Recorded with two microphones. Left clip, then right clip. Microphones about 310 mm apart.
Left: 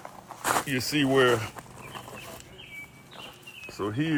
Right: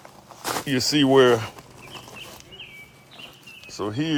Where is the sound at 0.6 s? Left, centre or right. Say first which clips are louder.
Right 5 dB; right.